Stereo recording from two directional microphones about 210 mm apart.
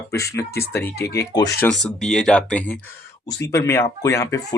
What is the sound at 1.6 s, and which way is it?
Speech, 5° left (ahead or behind).